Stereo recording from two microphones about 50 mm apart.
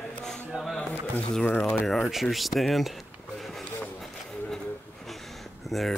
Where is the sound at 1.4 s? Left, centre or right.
Left.